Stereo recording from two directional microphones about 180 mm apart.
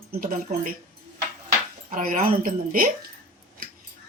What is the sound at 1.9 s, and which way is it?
Speech, 50° right (ahead or behind).